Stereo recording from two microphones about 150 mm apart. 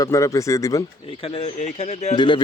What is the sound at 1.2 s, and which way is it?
Speech, 40° left (ahead or behind).